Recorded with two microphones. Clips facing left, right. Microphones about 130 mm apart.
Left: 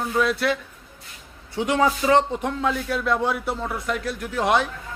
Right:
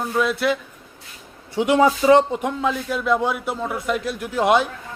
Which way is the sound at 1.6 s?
15° right (ahead or behind).